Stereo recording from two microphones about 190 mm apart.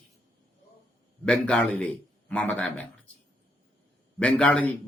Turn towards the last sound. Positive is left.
turn(degrees=5)  # may be behind; listen again after turning